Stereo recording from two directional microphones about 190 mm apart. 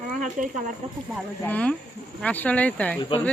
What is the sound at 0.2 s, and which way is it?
Speech, 40° right (ahead or behind).